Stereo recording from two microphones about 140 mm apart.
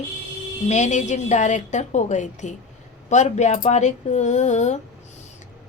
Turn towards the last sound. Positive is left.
turn(degrees=55)  # may be behind; listen again after turning